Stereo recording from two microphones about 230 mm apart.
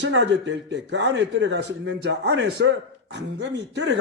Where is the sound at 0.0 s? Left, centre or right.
Right.